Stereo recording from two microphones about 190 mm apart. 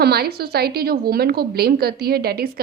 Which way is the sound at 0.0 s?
55° right (ahead or behind).